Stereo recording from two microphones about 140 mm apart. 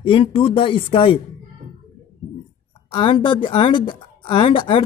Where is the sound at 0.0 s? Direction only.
40° left (ahead or behind).